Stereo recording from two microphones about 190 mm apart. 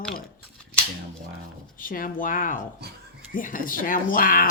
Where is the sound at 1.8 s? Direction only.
45° left (ahead or behind).